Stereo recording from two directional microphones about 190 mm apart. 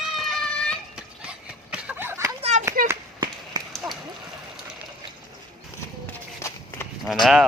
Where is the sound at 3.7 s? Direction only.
Centre (ahead or behind).